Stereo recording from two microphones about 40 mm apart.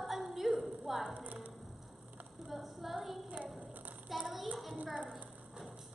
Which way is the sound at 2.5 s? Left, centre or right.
Centre.